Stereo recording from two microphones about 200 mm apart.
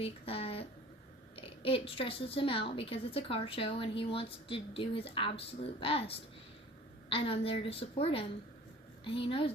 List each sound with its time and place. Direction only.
0.0 s a woman's voice: 30° left (ahead or behind)